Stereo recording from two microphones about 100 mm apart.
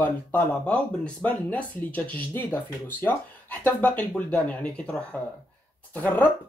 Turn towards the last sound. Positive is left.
turn(degrees=15)  # may be behind; listen again after turning